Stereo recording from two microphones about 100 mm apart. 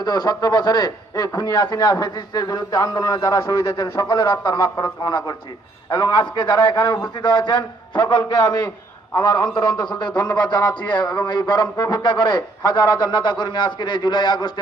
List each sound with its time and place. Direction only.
0.0 s a man's voice: 40° left (ahead or behind)